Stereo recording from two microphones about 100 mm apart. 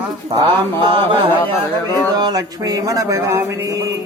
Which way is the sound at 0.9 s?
55° right (ahead or behind).